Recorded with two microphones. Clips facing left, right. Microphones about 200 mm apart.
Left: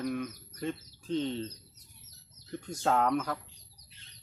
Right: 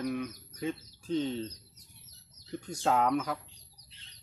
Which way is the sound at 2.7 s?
Centre (ahead or behind).